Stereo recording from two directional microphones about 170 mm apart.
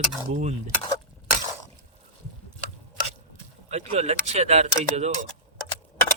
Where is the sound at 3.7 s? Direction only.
40° right (ahead or behind).